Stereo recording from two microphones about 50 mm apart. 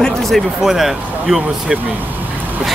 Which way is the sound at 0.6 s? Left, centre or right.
Centre.